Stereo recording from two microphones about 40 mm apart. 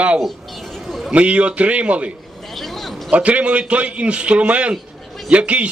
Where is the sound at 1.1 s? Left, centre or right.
Right.